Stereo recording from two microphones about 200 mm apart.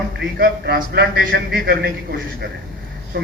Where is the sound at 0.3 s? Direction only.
50° right (ahead or behind).